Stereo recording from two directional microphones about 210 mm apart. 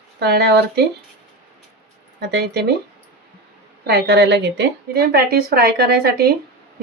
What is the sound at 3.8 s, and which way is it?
A woman's voice, 50° right (ahead or behind).